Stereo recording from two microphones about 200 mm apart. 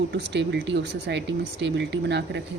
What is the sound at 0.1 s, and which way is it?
Speech, 60° right (ahead or behind).